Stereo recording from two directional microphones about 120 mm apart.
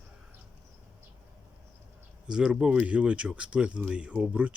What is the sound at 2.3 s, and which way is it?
Speech, 5° right (ahead or behind).